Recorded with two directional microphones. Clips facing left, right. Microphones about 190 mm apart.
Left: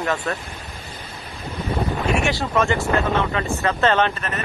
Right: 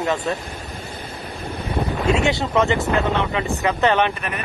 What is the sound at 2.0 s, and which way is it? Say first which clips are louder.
Speech: right 5 dB; 20° right (ahead or behind).